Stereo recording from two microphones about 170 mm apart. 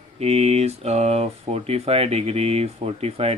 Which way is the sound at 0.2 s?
35° right (ahead or behind).